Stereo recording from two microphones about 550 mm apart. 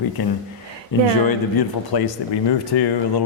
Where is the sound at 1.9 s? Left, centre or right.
Left.